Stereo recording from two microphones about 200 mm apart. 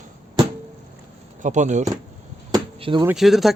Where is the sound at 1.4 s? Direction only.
40° right (ahead or behind).